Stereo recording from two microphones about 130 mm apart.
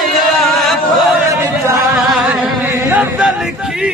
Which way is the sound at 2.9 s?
10° right (ahead or behind).